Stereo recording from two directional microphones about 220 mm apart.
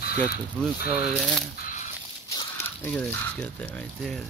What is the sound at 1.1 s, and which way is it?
Speech, centre (ahead or behind).